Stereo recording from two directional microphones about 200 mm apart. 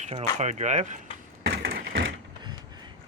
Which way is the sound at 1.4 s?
55° right (ahead or behind).